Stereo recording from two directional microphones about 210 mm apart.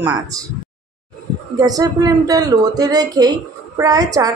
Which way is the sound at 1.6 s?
15° right (ahead or behind).